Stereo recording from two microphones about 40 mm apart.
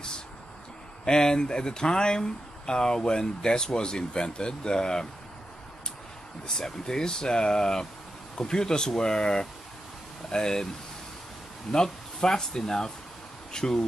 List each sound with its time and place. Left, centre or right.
1.0 s speech: centre
6.4 s speech: centre
11.7 s speech: centre